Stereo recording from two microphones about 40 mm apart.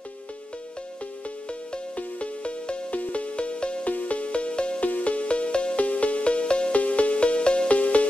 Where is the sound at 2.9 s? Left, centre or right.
Left.